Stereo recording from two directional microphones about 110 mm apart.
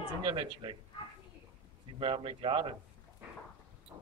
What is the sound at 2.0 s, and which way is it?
Speech, 50° right (ahead or behind).